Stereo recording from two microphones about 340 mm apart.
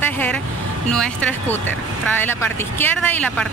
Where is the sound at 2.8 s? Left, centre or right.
Centre.